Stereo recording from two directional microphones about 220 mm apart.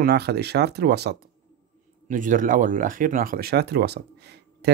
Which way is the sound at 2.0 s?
35° right (ahead or behind).